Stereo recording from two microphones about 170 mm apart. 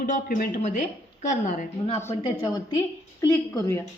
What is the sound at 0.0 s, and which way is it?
A woman's voice, 55° left (ahead or behind).